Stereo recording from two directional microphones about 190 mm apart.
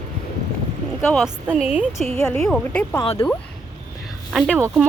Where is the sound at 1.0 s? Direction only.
Centre (ahead or behind).